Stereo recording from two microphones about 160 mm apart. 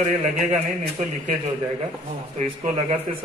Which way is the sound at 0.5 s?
45° right (ahead or behind).